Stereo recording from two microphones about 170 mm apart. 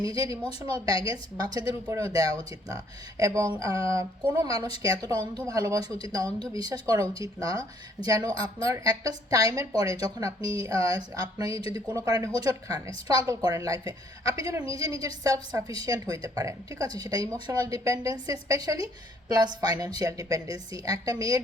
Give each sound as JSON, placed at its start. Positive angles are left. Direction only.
{"t": 0.0, "sound": "a woman's voice", "side_deg": -20}